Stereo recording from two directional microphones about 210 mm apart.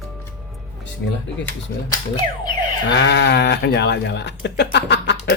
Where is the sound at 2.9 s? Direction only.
55° left (ahead or behind).